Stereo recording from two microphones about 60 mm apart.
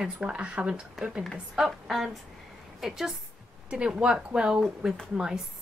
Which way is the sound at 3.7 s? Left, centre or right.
Centre.